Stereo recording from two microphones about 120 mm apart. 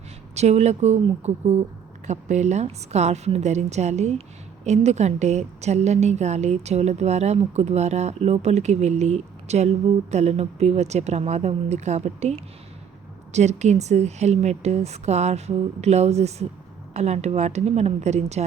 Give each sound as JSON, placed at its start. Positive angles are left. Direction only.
{"t": 0.3, "sound": "a woman's voice", "side_deg": -65}